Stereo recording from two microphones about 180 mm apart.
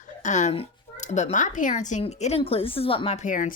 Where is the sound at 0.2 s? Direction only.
40° left (ahead or behind).